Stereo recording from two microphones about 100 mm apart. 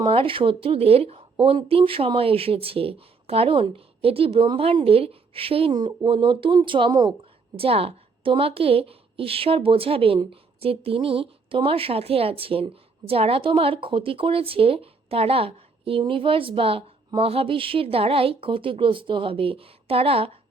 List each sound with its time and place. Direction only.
0.0 s a woman's voice: 60° right (ahead or behind)
5.7 s speech: 45° right (ahead or behind)
7.5 s a woman's voice: 70° right (ahead or behind)